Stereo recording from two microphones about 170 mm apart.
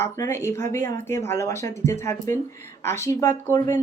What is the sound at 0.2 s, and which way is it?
Speech, 15° left (ahead or behind).